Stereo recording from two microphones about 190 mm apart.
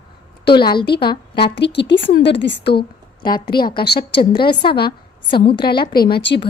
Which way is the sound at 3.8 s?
55° left (ahead or behind).